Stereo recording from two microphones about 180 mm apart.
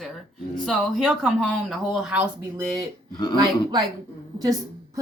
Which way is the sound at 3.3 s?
25° right (ahead or behind).